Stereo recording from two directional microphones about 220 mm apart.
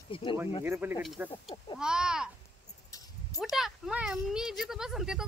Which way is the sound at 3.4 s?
Centre (ahead or behind).